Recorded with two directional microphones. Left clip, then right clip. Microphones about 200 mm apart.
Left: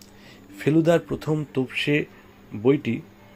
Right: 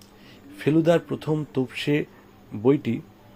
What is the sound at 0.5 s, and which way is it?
Speech, centre (ahead or behind).